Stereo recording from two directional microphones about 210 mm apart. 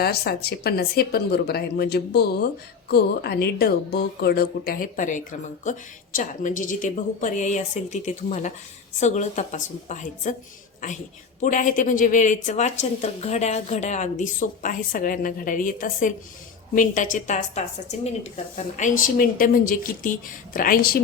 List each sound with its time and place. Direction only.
0.0 s a woman's voice: 50° left (ahead or behind)
11.3 s a woman's voice: 35° left (ahead or behind)